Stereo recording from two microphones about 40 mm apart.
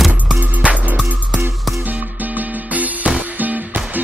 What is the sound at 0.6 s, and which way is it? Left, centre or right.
Music, right.